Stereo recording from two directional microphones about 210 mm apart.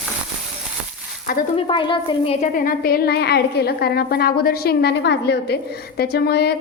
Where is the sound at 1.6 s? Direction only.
25° left (ahead or behind).